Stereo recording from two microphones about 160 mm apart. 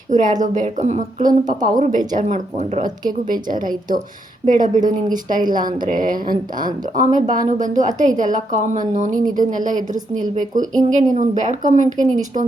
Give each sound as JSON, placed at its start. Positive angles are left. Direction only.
{"t": 0.1, "sound": "a woman's voice", "side_deg": -50}
{"t": 3.1, "sound": "a woman's voice", "side_deg": -60}